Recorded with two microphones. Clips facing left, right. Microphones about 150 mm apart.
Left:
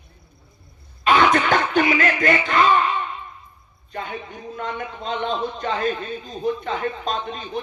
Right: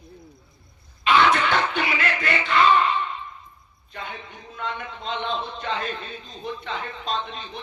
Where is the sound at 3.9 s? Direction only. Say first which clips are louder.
Left 5 dB; 45° left (ahead or behind).